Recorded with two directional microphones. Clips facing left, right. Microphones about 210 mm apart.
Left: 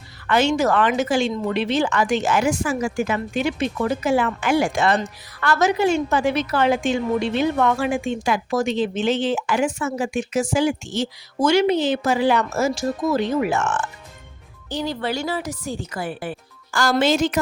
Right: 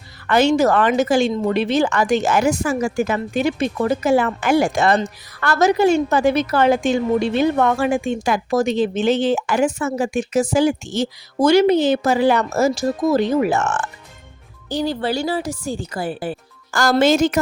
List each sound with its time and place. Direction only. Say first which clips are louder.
0.3 s a woman's voice: right 4 dB; 40° right (ahead or behind)
16.7 s speech: right 4 dB; 45° right (ahead or behind)